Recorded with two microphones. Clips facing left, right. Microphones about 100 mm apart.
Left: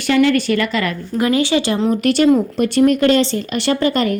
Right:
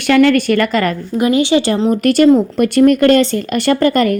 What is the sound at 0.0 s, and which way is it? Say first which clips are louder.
Speech: right 4 dB; 60° right (ahead or behind).